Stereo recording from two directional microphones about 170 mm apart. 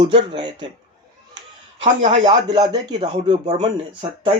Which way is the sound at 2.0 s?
35° right (ahead or behind).